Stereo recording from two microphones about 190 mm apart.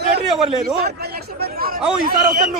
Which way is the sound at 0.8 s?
55° right (ahead or behind).